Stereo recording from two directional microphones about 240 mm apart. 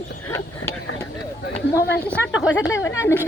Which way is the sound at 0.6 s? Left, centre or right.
Left.